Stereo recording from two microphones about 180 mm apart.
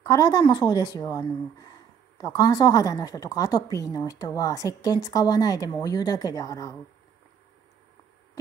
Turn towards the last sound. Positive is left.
turn(degrees=20)  # may be behind; listen again after turning